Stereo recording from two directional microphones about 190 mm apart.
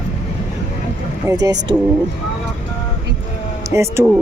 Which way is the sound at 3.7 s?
15° right (ahead or behind).